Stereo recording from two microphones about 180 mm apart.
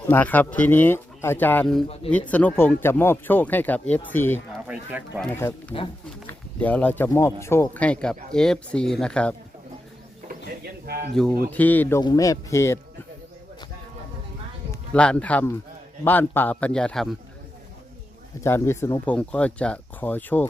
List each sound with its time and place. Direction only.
0.1 s speech: 10° left (ahead or behind)
4.6 s speech: 10° right (ahead or behind)
5.2 s speech: 10° left (ahead or behind)
10.6 s a sound: 65° right (ahead or behind)
11.1 s speech: 5° left (ahead or behind)
14.7 s speech: 5° left (ahead or behind)
18.4 s speech: 15° left (ahead or behind)